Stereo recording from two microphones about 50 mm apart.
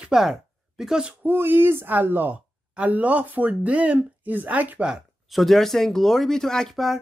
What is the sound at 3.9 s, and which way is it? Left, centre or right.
Speech, right.